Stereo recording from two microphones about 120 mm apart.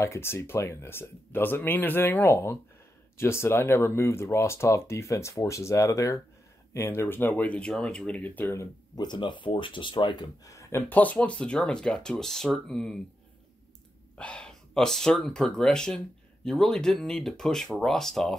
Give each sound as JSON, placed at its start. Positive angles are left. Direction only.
{"t": 0.0, "sound": "speech", "side_deg": 20}
{"t": 8.9, "sound": "speech", "side_deg": 40}
{"t": 10.9, "sound": "speech", "side_deg": 15}
{"t": 14.1, "sound": "speech", "side_deg": 10}